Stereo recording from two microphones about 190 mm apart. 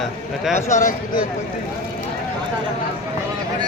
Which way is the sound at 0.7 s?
45° left (ahead or behind).